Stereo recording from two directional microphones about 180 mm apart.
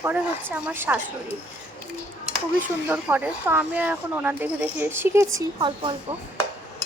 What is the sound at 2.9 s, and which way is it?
Speech, 10° right (ahead or behind).